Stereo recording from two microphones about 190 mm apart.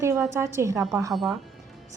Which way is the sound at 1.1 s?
Centre (ahead or behind).